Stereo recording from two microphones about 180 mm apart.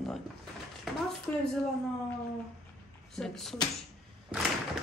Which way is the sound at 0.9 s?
Centre (ahead or behind).